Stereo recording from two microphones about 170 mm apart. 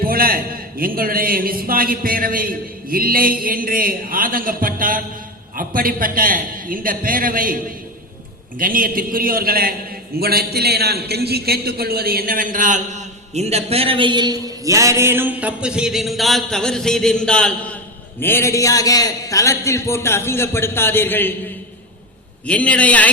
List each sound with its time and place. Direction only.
0.0 s a man's voice: 60° right (ahead or behind); by 21.3 s 10° left (ahead or behind)
22.4 s a man's voice: 10° left (ahead or behind)